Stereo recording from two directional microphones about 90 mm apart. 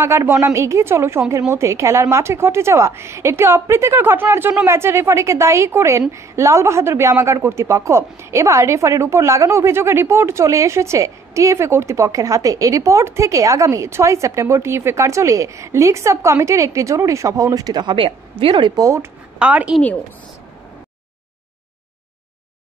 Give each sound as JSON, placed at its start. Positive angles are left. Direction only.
{"t": 0.0, "sound": "a woman's voice", "side_deg": -30}
{"t": 18.4, "sound": "speech", "side_deg": -80}
{"t": 18.8, "sound": "a woman's voice", "side_deg": -35}
{"t": 19.3, "sound": "a woman's voice", "side_deg": -15}